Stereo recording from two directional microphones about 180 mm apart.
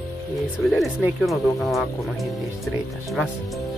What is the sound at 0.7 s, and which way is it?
Speech, centre (ahead or behind).